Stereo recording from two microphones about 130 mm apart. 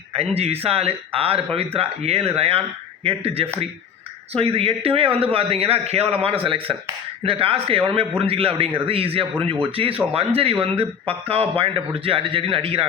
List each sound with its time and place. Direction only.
0.1 s a man's voice: 50° right (ahead or behind)